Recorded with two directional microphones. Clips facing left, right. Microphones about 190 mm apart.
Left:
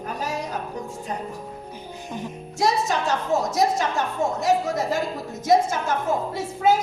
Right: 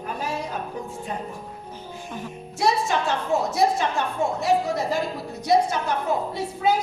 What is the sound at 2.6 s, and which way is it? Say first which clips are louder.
Music: even; 40° left (ahead or behind).